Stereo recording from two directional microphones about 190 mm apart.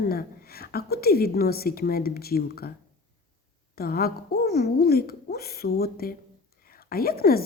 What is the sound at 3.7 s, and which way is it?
A woman's voice, 55° left (ahead or behind).